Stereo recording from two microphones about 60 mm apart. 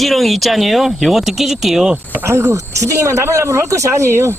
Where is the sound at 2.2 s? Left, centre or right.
Right.